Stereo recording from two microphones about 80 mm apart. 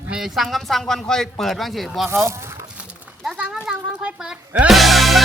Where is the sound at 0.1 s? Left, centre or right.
Centre.